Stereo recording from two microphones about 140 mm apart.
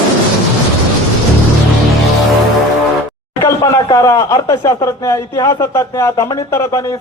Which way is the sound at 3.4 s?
20° left (ahead or behind).